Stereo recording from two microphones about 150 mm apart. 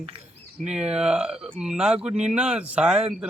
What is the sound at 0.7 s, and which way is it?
A man's voice, 5° right (ahead or behind).